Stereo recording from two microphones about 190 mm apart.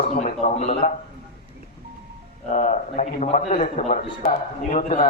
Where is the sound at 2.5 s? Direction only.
40° left (ahead or behind).